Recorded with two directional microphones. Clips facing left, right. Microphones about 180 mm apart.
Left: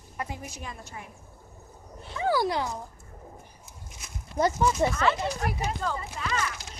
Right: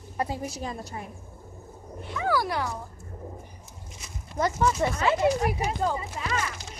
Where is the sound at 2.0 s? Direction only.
30° left (ahead or behind).